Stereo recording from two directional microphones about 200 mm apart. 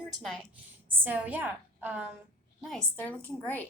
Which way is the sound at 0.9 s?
10° right (ahead or behind).